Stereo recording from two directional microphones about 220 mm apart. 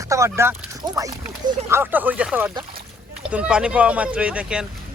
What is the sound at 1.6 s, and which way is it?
Speech, 10° right (ahead or behind).